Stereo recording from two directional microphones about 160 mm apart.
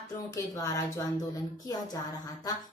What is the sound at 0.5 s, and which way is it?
Speech, 20° left (ahead or behind).